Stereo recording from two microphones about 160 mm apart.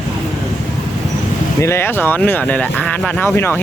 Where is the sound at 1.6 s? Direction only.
15° left (ahead or behind).